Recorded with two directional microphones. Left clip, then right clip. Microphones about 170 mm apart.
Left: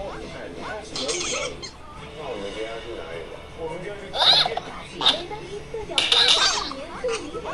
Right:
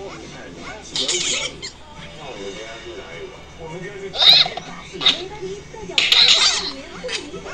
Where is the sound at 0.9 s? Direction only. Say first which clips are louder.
Right 7 dB; 5° right (ahead or behind).